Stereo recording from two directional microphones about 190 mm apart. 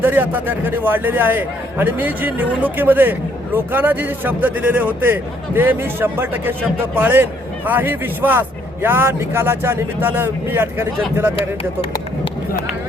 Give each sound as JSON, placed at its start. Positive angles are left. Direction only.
{"t": 0.0, "sound": "a man's voice", "side_deg": -10}
{"t": 11.3, "sound": "speech", "side_deg": 30}